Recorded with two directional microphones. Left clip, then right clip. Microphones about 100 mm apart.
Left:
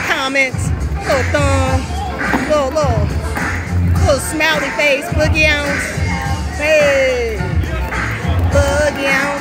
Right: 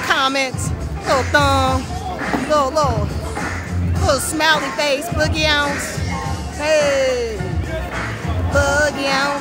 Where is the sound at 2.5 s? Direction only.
20° right (ahead or behind).